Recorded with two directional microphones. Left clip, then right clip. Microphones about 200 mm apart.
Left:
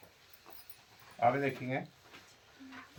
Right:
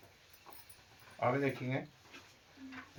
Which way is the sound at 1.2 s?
15° left (ahead or behind).